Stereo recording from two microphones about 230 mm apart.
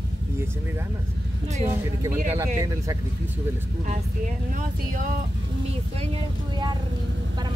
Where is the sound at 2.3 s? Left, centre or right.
Centre.